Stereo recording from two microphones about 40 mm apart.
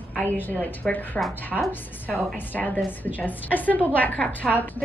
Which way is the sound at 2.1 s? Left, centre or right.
Left.